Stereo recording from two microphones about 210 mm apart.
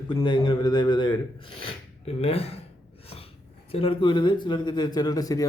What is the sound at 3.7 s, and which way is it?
Speech, 25° left (ahead or behind).